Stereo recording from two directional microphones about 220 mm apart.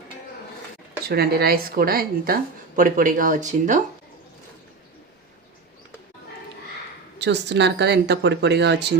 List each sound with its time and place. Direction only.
1.0 s a woman's voice: 45° right (ahead or behind)
7.3 s a woman's voice: 50° right (ahead or behind)